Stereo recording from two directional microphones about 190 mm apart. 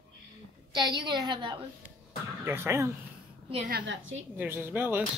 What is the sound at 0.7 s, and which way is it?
Speech, 25° right (ahead or behind).